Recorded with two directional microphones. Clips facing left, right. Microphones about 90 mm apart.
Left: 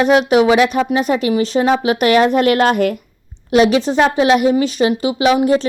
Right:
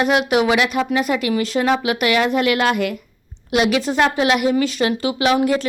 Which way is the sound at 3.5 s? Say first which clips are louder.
Left 5 dB; 30° left (ahead or behind).